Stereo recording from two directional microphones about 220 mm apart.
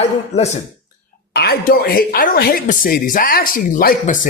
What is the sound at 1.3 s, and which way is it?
Speech, 45° left (ahead or behind).